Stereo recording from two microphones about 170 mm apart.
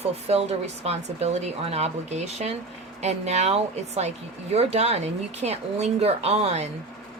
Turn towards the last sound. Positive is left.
turn(degrees=-40)  # may be behind; listen again after turning